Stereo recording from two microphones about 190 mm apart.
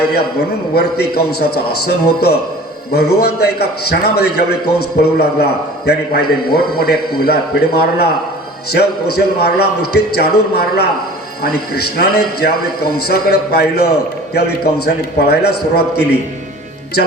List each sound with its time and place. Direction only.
0.7 s a man's voice: 55° left (ahead or behind)